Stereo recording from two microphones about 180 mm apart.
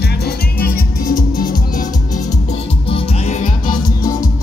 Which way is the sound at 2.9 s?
35° left (ahead or behind).